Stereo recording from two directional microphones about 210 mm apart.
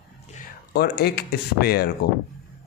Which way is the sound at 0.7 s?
50° left (ahead or behind).